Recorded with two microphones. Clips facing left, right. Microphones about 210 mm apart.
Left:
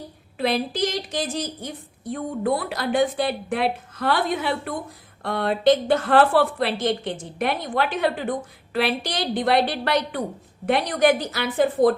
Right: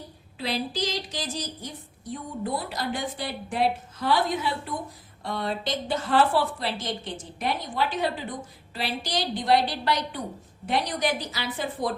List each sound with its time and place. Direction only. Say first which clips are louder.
0.3 s a woman's voice: left 6 dB; 55° left (ahead or behind)